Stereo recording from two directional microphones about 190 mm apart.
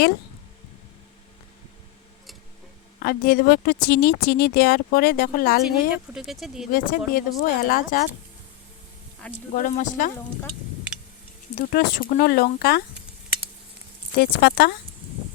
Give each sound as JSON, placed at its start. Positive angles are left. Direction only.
{"t": 3.0, "sound": "speech", "side_deg": 50}
{"t": 5.6, "sound": "speech", "side_deg": 0}
{"t": 6.7, "sound": "speech", "side_deg": 45}
{"t": 9.2, "sound": "speech", "side_deg": 5}
{"t": 9.6, "sound": "speech", "side_deg": 40}
{"t": 11.5, "sound": "speech", "side_deg": 50}
{"t": 14.2, "sound": "speech", "side_deg": 55}